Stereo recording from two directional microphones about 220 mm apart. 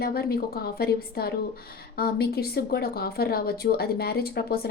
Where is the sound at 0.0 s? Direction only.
45° left (ahead or behind).